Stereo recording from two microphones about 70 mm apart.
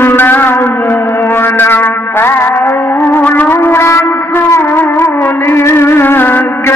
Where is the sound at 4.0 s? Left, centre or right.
Left.